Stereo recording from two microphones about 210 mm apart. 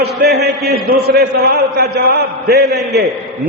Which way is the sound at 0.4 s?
45° right (ahead or behind).